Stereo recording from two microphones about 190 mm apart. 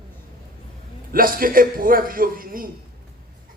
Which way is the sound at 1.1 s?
50° right (ahead or behind).